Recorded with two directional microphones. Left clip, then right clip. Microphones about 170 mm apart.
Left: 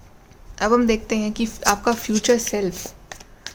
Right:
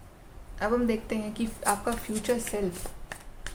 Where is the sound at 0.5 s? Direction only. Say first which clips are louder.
Left 9 dB; 50° left (ahead or behind); by 2.7 s 70° left (ahead or behind).